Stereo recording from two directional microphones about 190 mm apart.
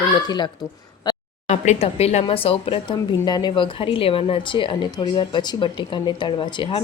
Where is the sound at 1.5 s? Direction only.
35° left (ahead or behind).